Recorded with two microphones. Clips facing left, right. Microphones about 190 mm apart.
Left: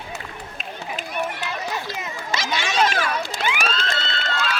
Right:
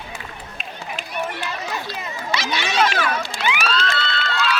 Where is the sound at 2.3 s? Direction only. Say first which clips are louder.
Right 1 dB; 45° left (ahead or behind).